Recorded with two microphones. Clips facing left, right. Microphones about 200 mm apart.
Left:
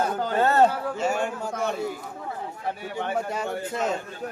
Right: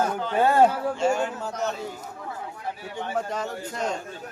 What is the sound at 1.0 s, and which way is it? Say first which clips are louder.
Speech: right 2 dB; 5° left (ahead or behind).